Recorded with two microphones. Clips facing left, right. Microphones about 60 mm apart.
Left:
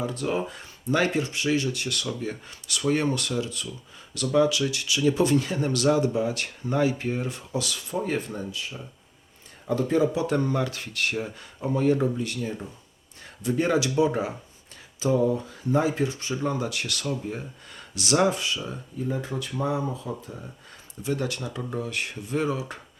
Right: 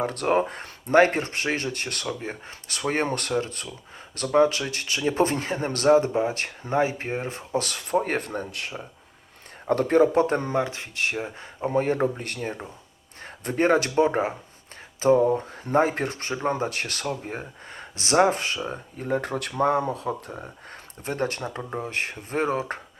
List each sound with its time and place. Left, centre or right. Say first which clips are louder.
0.0 s speech: right 5 dB; right
21.0 s speech: right 1 dB; right